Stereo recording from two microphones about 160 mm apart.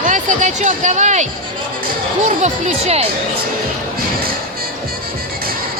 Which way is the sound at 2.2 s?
50° right (ahead or behind).